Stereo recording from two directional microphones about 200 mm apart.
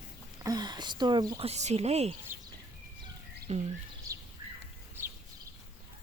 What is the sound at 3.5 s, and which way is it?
Speech, 35° right (ahead or behind).